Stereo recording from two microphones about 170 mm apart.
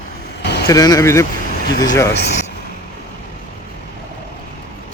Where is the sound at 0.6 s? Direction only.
20° left (ahead or behind).